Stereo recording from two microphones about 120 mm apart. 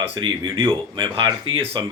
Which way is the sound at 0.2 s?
45° right (ahead or behind).